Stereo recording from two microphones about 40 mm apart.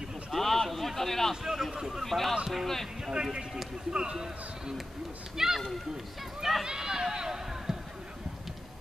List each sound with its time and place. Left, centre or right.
0.3 s a sound: centre
1.3 s a man's voice: centre
2.0 s speech: centre
3.1 s a man's voice: centre
6.6 s speech: centre